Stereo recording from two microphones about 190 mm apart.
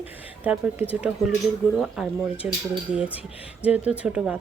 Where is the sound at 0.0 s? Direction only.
10° right (ahead or behind).